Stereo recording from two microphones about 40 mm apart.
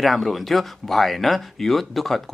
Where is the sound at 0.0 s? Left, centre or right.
Centre.